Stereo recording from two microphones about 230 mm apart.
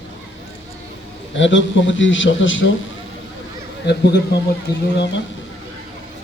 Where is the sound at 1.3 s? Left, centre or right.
Left.